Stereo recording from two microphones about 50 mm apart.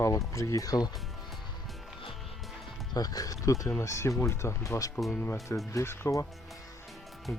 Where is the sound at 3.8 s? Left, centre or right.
Left.